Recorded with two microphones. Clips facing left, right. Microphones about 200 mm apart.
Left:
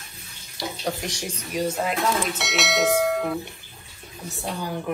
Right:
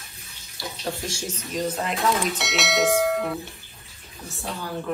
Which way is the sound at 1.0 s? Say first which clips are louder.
Even; 15° left (ahead or behind).